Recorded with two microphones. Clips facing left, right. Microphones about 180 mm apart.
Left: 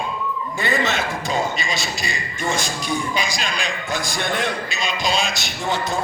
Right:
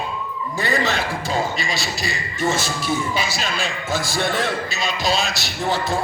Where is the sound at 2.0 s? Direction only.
Centre (ahead or behind).